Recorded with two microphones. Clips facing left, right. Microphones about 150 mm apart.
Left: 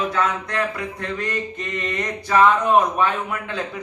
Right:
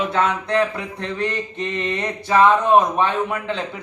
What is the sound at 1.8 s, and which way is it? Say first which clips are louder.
Speech: even; 25° right (ahead or behind).